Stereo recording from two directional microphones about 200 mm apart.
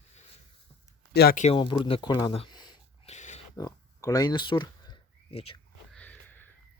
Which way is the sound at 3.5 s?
15° left (ahead or behind).